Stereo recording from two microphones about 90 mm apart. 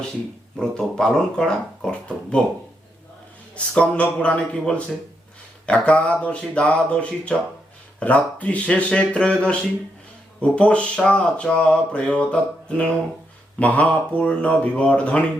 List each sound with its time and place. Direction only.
0.5 s speech: 5° left (ahead or behind)
3.5 s speech: 15° left (ahead or behind)